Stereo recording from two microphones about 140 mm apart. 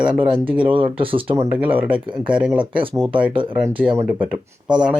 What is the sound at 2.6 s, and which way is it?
Speech, 35° right (ahead or behind).